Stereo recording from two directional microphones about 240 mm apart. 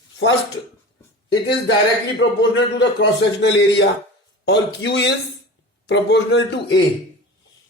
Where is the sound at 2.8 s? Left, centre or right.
Left.